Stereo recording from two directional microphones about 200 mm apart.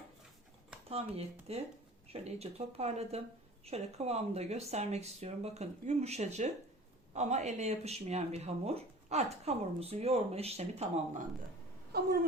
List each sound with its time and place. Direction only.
0.9 s speech: 30° right (ahead or behind)
11.9 s speech: 55° right (ahead or behind)